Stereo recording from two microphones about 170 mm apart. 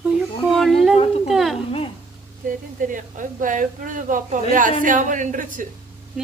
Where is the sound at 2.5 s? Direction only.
50° right (ahead or behind).